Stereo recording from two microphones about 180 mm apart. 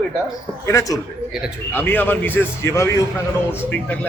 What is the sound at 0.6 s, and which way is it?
A man's voice, 20° left (ahead or behind).